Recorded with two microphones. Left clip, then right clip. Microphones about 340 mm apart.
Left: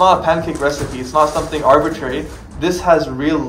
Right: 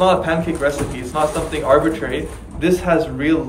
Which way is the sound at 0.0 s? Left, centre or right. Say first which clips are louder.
Left 4 dB; centre.